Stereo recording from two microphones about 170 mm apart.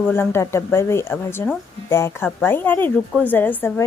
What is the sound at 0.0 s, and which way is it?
A woman's voice, 15° left (ahead or behind).